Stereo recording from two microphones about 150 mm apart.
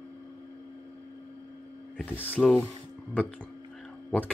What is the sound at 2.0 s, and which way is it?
Speech, 15° left (ahead or behind).